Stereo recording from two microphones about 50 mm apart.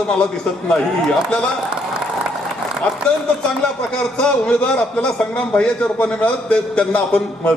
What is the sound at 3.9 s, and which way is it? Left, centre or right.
A man's voice, centre.